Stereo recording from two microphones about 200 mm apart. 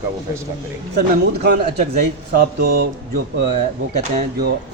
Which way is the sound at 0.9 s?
55° right (ahead or behind).